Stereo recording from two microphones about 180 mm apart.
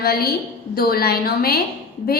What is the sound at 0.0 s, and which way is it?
A woman's voice, 55° left (ahead or behind).